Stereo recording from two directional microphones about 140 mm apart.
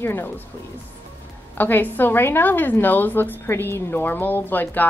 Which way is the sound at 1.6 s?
15° left (ahead or behind).